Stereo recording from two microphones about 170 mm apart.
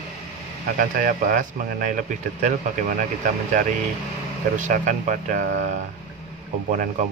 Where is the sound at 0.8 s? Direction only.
55° right (ahead or behind).